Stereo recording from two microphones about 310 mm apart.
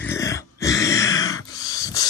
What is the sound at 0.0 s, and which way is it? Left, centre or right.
Grunt, centre.